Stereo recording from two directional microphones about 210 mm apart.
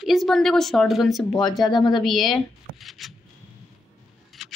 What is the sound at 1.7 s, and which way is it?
Speech, 20° left (ahead or behind).